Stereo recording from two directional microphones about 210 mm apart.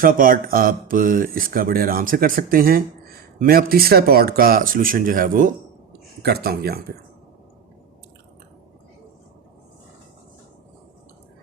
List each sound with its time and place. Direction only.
0.0 s speech: 40° right (ahead or behind)